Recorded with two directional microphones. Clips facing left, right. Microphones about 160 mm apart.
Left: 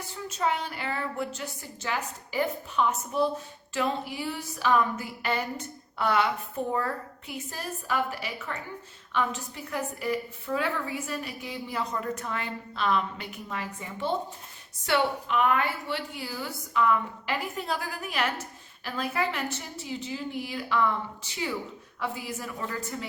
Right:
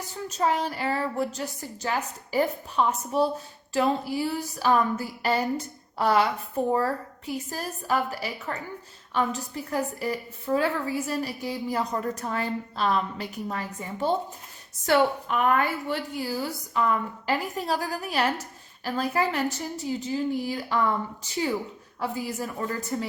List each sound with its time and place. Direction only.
0.3 s a woman's voice: 40° right (ahead or behind)
22.0 s a woman's voice: 40° right (ahead or behind)